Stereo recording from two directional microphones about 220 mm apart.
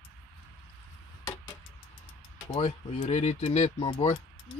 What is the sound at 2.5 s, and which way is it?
Speech, 25° left (ahead or behind).